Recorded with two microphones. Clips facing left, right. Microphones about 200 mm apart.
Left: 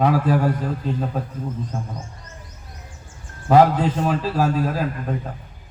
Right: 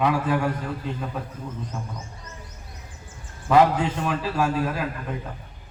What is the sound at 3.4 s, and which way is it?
A man's voice, 40° left (ahead or behind).